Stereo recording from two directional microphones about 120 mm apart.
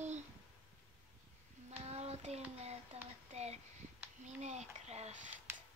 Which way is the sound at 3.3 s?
65° right (ahead or behind).